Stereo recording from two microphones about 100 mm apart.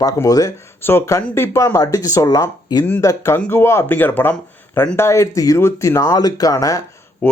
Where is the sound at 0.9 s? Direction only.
25° left (ahead or behind).